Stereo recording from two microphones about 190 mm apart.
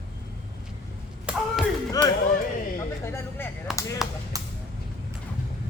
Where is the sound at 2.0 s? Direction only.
20° left (ahead or behind).